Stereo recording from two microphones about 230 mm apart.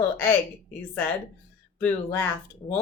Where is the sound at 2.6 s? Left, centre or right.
Centre.